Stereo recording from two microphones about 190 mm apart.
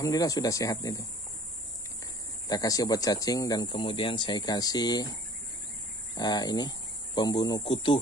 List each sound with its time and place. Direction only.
0.0 s speech: 20° left (ahead or behind)
2.4 s speech: 20° left (ahead or behind)
6.1 s speech: 20° left (ahead or behind)